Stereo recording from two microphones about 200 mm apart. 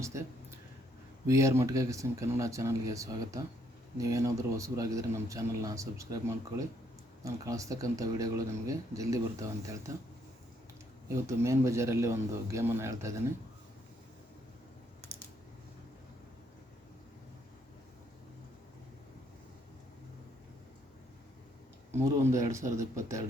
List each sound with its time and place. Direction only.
0.0 s a man's voice: 15° right (ahead or behind)
1.3 s a man's voice: 15° right (ahead or behind)
11.1 s a man's voice: 15° right (ahead or behind)
21.9 s a man's voice: 15° right (ahead or behind)